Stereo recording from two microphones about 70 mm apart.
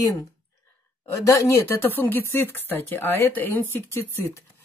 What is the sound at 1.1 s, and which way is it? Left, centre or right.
A woman's voice, left.